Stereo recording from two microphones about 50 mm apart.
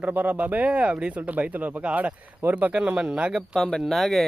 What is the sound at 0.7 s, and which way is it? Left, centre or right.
Speech, centre.